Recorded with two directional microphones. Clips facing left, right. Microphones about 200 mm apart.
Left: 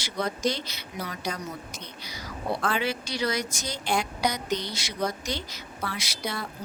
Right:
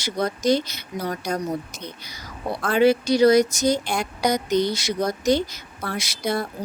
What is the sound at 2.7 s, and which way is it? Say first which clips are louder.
A woman's voice: right 15 dB; 45° right (ahead or behind).